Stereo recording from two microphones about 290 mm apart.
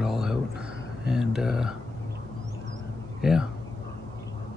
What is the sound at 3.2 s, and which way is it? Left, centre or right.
Speech, centre.